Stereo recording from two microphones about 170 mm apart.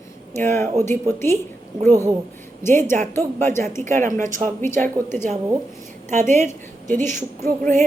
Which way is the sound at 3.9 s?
50° right (ahead or behind).